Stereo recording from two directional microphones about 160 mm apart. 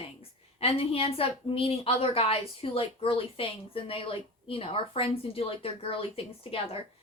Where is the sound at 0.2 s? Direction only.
35° left (ahead or behind).